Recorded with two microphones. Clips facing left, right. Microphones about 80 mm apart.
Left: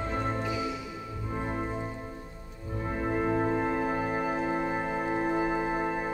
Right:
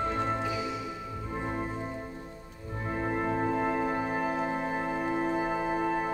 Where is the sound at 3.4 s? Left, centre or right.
Centre.